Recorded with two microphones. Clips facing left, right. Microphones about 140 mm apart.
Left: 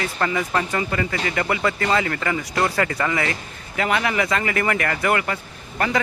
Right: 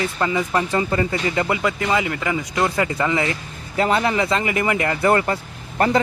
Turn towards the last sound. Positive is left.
turn(degrees=-35)  # may be behind; listen again after turning